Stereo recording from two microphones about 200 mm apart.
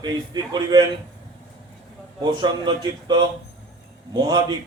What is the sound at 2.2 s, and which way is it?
A man's voice, 20° right (ahead or behind).